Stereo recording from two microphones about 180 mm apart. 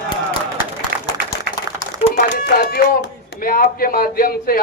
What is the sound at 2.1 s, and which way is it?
Speech, 60° left (ahead or behind).